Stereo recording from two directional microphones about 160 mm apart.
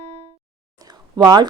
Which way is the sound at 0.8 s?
25° right (ahead or behind).